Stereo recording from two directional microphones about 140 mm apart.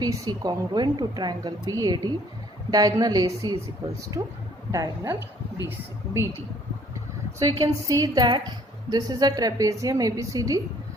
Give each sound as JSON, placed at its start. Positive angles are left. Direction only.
{"t": 0.0, "sound": "a woman's voice", "side_deg": -30}
{"t": 7.3, "sound": "a woman's voice", "side_deg": -25}